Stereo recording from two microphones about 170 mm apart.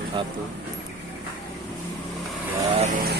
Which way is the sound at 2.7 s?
40° right (ahead or behind).